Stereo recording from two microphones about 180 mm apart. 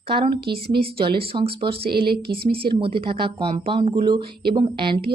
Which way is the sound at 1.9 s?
60° right (ahead or behind).